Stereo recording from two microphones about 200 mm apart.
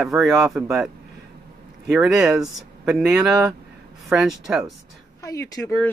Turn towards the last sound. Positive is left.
turn(degrees=15)  # may be behind; listen again after turning